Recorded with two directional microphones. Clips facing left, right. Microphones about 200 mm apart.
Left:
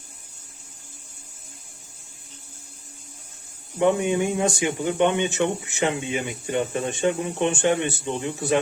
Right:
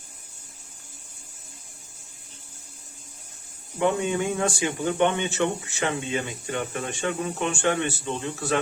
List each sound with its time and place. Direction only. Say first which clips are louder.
3.8 s speech: left 3 dB; 20° left (ahead or behind)